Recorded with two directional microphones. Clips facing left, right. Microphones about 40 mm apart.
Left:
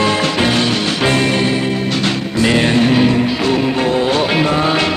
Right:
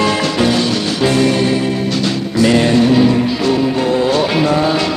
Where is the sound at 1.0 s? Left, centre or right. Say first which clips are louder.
Right 2 dB; left.